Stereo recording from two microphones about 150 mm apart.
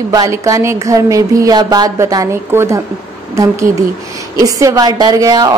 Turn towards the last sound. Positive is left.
turn(degrees=-25)  # may be behind; listen again after turning